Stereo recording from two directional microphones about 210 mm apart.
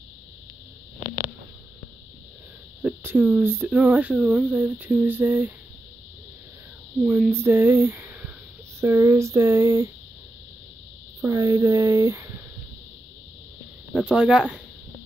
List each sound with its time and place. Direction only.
0.9 s a sound: 20° right (ahead or behind)
2.8 s speech: 10° right (ahead or behind)
7.0 s speech: centre (ahead or behind)
11.1 s speech: 15° right (ahead or behind)
13.9 s speech: 5° right (ahead or behind)